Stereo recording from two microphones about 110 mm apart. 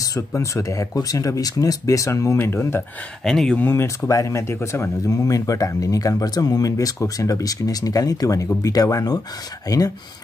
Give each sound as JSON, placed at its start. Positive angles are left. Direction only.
{"t": 0.0, "sound": "speech", "side_deg": 30}
{"t": 3.3, "sound": "speech", "side_deg": 5}
{"t": 3.5, "sound": "speech", "side_deg": 20}